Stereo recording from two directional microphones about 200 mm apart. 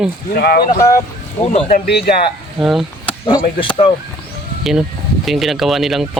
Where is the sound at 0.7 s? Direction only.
15° left (ahead or behind).